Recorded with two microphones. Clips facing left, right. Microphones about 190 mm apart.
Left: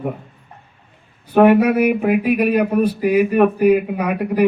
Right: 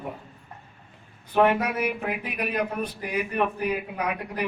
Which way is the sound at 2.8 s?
10° left (ahead or behind).